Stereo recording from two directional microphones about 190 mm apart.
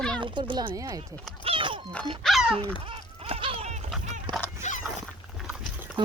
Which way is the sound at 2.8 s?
30° right (ahead or behind).